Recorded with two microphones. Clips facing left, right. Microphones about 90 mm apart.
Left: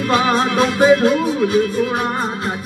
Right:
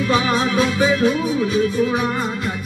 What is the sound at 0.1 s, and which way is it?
Music, 55° left (ahead or behind).